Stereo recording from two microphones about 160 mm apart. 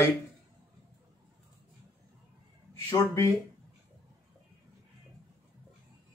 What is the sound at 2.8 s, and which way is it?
Speech, 20° left (ahead or behind).